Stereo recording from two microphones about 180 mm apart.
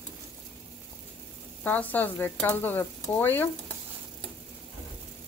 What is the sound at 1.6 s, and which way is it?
Speech, 10° left (ahead or behind).